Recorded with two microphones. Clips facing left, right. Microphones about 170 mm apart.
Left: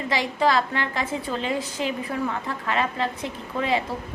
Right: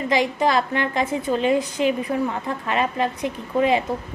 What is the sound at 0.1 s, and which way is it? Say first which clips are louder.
A woman's voice: right 2 dB; 20° right (ahead or behind).